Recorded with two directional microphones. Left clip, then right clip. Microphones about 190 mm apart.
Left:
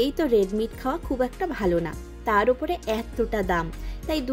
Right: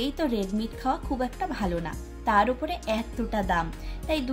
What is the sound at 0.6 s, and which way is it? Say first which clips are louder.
A woman's voice: left 2 dB; 45° left (ahead or behind).